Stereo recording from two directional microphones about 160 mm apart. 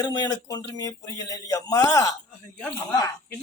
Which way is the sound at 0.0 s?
20° left (ahead or behind).